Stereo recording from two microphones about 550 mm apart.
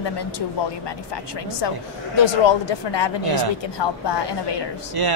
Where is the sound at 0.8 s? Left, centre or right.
Left.